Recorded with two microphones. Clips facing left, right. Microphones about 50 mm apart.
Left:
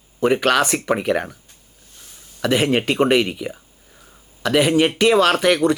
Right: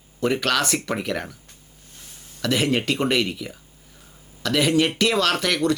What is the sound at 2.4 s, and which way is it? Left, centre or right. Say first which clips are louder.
Speech: left 4 dB; centre.